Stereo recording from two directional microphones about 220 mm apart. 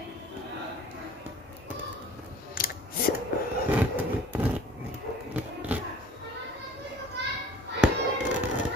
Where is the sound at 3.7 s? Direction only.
10° right (ahead or behind).